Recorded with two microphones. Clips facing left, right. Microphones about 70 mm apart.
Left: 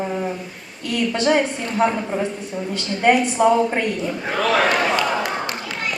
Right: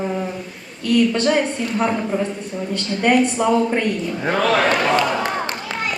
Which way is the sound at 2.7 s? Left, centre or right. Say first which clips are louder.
Left 1 dB; centre.